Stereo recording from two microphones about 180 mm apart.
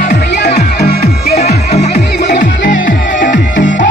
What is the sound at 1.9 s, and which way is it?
Music, 65° left (ahead or behind).